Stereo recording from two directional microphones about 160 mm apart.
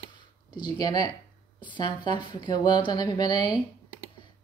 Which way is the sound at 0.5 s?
25° left (ahead or behind).